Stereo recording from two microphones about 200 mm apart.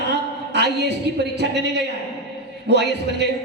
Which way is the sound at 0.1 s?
55° right (ahead or behind).